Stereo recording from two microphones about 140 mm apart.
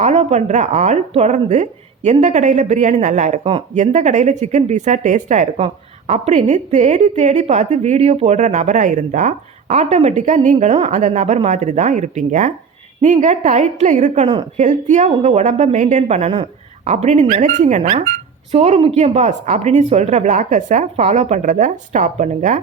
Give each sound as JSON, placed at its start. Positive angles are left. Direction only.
{"t": 0.0, "sound": "a woman's voice", "side_deg": -50}
{"t": 5.5, "sound": "a woman's voice", "side_deg": -45}
{"t": 18.5, "sound": "a woman's voice", "side_deg": -45}